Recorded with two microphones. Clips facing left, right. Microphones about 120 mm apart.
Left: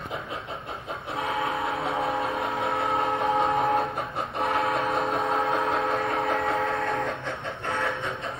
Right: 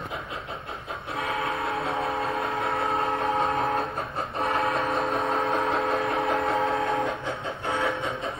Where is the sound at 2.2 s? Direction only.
25° right (ahead or behind).